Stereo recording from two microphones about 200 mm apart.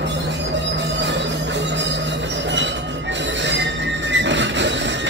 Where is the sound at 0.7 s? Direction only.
60° right (ahead or behind).